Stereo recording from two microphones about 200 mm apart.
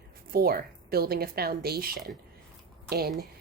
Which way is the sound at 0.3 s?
50° right (ahead or behind).